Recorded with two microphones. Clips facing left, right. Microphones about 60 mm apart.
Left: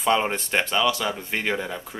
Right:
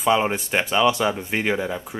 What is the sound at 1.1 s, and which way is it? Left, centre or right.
Speech, centre.